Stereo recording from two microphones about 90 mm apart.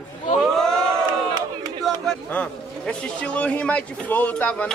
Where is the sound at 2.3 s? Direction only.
10° left (ahead or behind).